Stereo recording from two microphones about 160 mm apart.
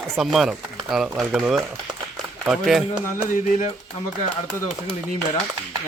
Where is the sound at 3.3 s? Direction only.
55° left (ahead or behind).